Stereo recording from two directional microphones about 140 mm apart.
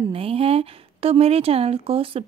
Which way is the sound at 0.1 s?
45° right (ahead or behind).